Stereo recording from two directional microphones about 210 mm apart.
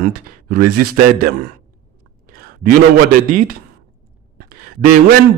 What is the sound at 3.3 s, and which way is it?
Speech, 45° right (ahead or behind).